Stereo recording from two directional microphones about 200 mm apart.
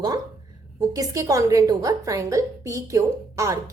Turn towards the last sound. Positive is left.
turn(degrees=-15)  # may be behind; listen again after turning